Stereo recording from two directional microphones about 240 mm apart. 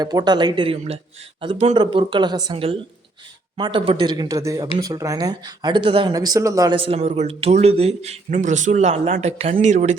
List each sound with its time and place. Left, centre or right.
0.0 s speech: centre